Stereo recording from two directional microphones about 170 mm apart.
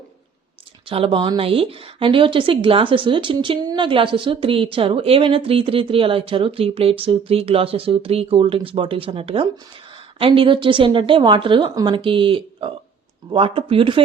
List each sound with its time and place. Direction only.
0.9 s a woman's voice: 30° right (ahead or behind)